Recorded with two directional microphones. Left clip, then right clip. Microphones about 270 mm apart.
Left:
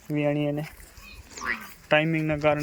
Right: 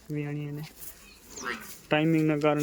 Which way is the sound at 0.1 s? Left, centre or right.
Left.